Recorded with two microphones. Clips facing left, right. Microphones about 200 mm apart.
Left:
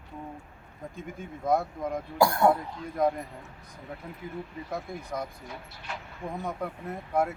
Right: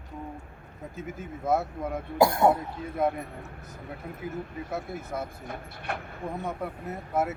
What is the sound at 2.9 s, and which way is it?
Speech, 5° right (ahead or behind).